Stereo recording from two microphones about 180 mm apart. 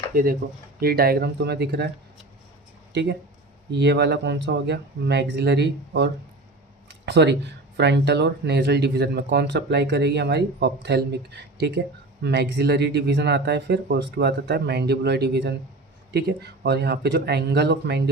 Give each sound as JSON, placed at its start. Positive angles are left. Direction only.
{"t": 0.1, "sound": "speech", "side_deg": -50}
{"t": 2.9, "sound": "speech", "side_deg": -70}
{"t": 6.8, "sound": "a sound", "side_deg": -70}
{"t": 7.8, "sound": "speech", "side_deg": -70}